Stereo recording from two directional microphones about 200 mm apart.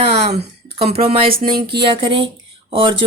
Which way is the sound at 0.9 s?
45° right (ahead or behind).